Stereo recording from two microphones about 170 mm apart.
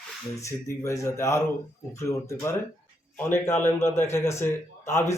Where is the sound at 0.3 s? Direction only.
15° left (ahead or behind).